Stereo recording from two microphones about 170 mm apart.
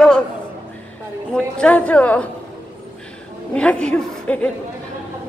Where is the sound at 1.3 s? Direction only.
5° left (ahead or behind).